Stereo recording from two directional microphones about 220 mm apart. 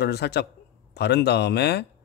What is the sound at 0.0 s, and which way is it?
A man's voice, 50° left (ahead or behind).